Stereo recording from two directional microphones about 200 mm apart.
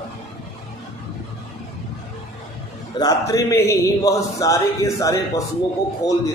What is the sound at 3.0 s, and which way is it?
A man's voice, 15° left (ahead or behind).